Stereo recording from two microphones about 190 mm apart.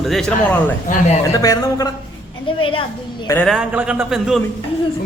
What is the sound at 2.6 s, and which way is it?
Speech, 30° left (ahead or behind).